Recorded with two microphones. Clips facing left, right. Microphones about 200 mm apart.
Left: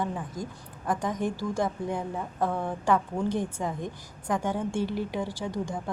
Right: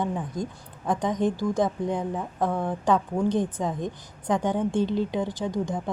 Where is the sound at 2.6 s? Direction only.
15° right (ahead or behind).